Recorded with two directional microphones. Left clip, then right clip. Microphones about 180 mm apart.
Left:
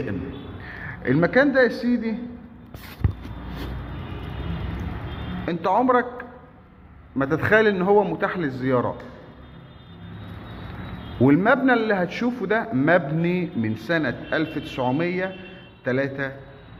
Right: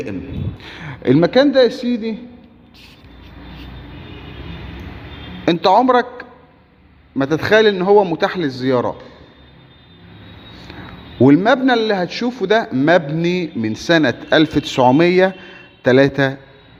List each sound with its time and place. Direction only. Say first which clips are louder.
0.7 s speech: right 8 dB; 65° right (ahead or behind); by 2.0 s 40° right (ahead or behind)
5.7 s a man's voice: right 4 dB; 35° right (ahead or behind)
11.2 s a man's voice: right 6 dB; 40° right (ahead or behind); by 16.3 s 60° right (ahead or behind)